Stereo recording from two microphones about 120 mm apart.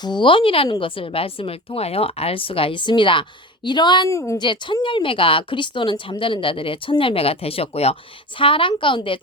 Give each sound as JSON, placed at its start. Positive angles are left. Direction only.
{"t": 0.0, "sound": "a woman's voice", "side_deg": 40}
{"t": 4.1, "sound": "a woman's voice", "side_deg": 25}
{"t": 4.4, "sound": "a woman's voice", "side_deg": 40}
{"t": 8.4, "sound": "a woman's voice", "side_deg": 45}